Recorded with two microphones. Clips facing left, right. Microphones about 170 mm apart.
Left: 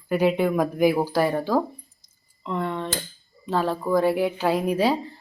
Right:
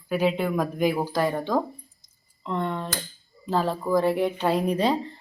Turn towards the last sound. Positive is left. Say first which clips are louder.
# left 1 dB
turn(degrees=5)  # may be behind; listen again after turning